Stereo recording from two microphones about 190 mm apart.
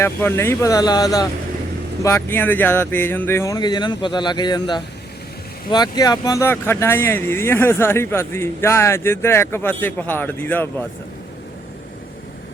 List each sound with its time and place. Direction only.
0.0 s speech: 10° left (ahead or behind)